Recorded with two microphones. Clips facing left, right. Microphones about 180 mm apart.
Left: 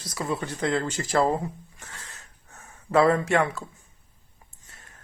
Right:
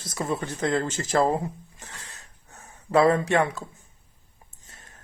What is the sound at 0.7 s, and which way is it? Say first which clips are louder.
Speech: right 1 dB; 45° right (ahead or behind).